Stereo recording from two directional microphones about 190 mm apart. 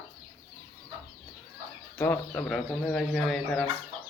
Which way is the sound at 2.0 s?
5° left (ahead or behind).